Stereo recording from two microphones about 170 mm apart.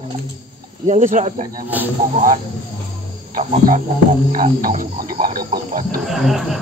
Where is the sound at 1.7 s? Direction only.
10° right (ahead or behind).